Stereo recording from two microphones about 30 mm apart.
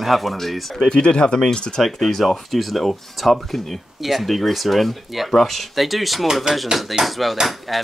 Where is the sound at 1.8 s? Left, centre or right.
Centre.